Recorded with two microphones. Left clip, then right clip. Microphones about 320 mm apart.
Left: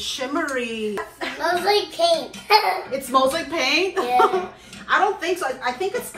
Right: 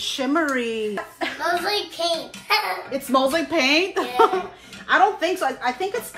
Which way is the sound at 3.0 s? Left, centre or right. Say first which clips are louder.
Even; right.